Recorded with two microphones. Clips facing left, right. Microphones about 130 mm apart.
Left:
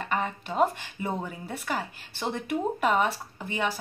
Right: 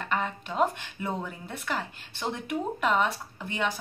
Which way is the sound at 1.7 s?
5° left (ahead or behind).